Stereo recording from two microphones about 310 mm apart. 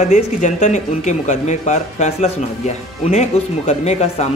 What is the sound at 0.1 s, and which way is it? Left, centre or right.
Speech, left.